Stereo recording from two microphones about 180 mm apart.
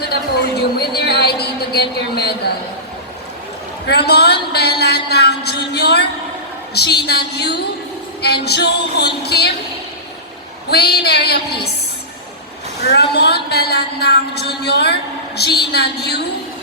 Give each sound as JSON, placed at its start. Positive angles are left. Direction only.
{"t": 0.0, "sound": "a sound", "side_deg": 60}
{"t": 3.8, "sound": "a man's voice", "side_deg": 65}
{"t": 10.7, "sound": "a woman's voice", "side_deg": 60}
{"t": 12.9, "sound": "a woman's voice", "side_deg": 65}